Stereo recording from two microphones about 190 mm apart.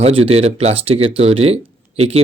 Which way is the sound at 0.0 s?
30° right (ahead or behind).